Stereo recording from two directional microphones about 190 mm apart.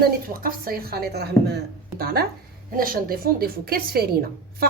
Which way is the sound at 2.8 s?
50° right (ahead or behind).